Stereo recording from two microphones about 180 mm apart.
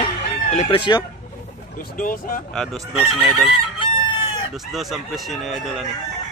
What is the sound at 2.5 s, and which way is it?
Speech, centre (ahead or behind).